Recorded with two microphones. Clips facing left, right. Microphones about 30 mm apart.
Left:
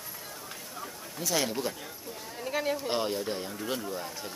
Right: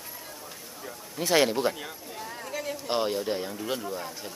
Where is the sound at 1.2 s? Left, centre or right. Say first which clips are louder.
Right 7 dB; right.